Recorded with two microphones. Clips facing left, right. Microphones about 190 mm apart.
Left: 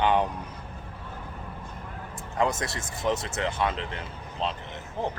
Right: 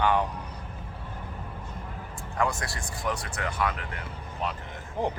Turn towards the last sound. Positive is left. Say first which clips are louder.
# right 2 dB
turn(degrees=-15)  # may be behind; listen again after turning